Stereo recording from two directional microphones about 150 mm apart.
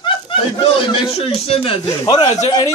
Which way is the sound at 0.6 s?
40° left (ahead or behind).